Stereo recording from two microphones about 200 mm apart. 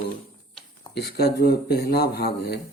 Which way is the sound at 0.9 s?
55° left (ahead or behind).